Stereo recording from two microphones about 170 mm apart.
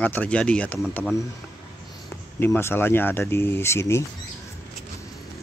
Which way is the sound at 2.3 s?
15° left (ahead or behind).